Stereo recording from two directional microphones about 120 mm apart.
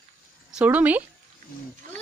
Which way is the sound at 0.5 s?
10° right (ahead or behind).